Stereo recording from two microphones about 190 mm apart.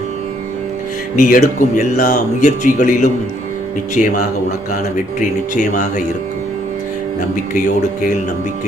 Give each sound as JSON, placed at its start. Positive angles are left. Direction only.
{"t": 1.1, "sound": "speech", "side_deg": 45}
{"t": 5.5, "sound": "speech", "side_deg": 40}
{"t": 7.5, "sound": "speech", "side_deg": 45}